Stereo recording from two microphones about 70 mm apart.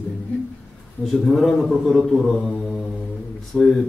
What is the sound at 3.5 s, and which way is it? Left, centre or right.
Speech, centre.